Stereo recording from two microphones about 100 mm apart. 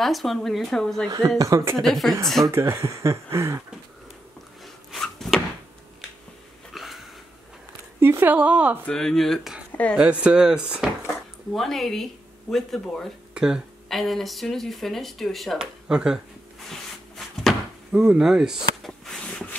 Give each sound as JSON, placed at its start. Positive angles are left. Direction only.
{"t": 0.0, "sound": "speech", "side_deg": 0}
{"t": 1.0, "sound": "speech", "side_deg": -40}
{"t": 1.8, "sound": "speech", "side_deg": 5}
{"t": 2.4, "sound": "speech", "side_deg": -30}
{"t": 4.9, "sound": "a sound", "side_deg": 0}
{"t": 6.7, "sound": "a sound", "side_deg": 0}
{"t": 8.0, "sound": "a woman's voice", "side_deg": -20}
{"t": 8.8, "sound": "speech", "side_deg": 5}
{"t": 13.3, "sound": "speech", "side_deg": -5}
{"t": 17.9, "sound": "a sound", "side_deg": -10}